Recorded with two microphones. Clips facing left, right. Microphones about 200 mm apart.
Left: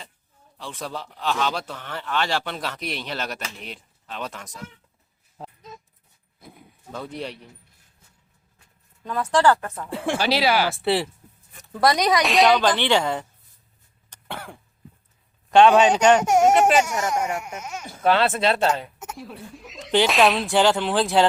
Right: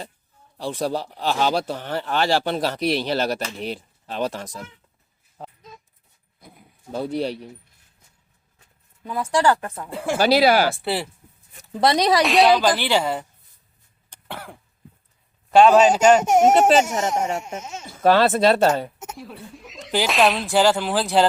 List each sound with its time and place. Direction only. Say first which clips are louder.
0.5 s speech: right 8 dB; 35° right (ahead or behind)
6.9 s speech: right 8 dB; 35° right (ahead or behind)
9.0 s speech: even; 10° right (ahead or behind)
9.6 s speech: right 1 dB; 25° right (ahead or behind)
10.2 s speech: right 6 dB; 45° right (ahead or behind)
10.8 s speech: left 3 dB; centre (ahead or behind)
11.7 s speech: right 1 dB; 25° right (ahead or behind)
12.2 s speech: right 1 dB; centre (ahead or behind)
14.1 s cough: even; 5° right (ahead or behind)
15.4 s speech: right 1 dB; 5° right (ahead or behind)
16.2 s speech: right 2 dB; 20° right (ahead or behind)
18.0 s speech: right 4 dB; 40° right (ahead or behind)
19.1 s speech: even; centre (ahead or behind)